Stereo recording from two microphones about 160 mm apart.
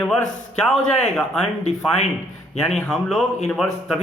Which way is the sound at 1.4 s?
45° left (ahead or behind).